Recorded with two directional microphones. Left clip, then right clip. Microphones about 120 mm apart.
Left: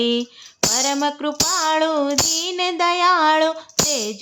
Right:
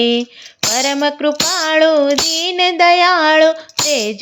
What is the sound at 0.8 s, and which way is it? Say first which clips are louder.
Child singing: right 8 dB; 15° right (ahead or behind).